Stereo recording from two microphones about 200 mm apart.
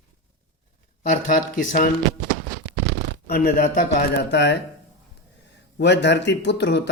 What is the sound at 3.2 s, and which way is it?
Speech, 50° left (ahead or behind).